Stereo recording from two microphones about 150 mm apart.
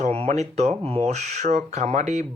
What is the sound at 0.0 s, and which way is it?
Speech, 45° right (ahead or behind).